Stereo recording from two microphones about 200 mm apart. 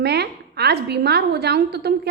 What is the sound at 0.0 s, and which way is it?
A woman's voice, 55° right (ahead or behind).